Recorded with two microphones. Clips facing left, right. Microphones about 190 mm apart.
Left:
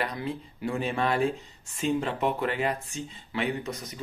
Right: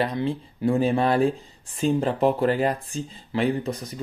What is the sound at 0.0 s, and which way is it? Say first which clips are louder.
Speech: right 7 dB; 30° right (ahead or behind).